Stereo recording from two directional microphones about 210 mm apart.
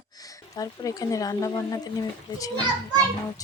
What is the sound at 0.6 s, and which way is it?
Speech, 15° left (ahead or behind).